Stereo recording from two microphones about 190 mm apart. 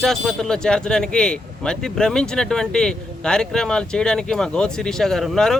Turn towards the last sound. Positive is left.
turn(degrees=0)  # may be behind; listen again after turning